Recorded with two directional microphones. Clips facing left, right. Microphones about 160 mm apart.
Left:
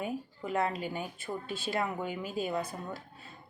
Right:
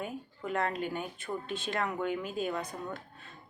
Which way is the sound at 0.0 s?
5° left (ahead or behind).